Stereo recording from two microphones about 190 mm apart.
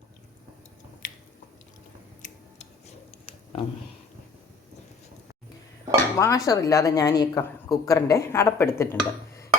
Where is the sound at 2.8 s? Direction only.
30° left (ahead or behind).